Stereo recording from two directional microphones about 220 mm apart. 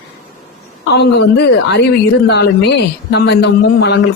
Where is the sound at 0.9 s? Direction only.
50° left (ahead or behind).